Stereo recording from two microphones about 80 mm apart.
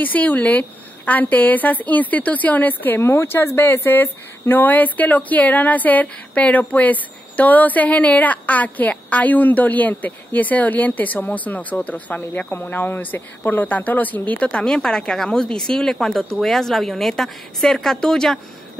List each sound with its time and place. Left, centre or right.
0.0 s a woman's voice: centre